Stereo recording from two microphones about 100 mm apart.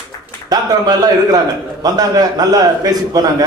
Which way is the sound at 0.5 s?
40° right (ahead or behind).